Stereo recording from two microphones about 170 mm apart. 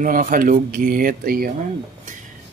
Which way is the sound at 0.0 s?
55° right (ahead or behind).